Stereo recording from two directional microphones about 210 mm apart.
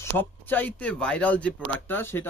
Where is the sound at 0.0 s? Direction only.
10° left (ahead or behind).